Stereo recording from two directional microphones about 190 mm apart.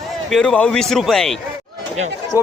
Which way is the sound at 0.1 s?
Centre (ahead or behind).